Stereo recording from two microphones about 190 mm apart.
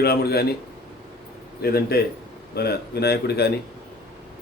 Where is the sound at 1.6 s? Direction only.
55° left (ahead or behind).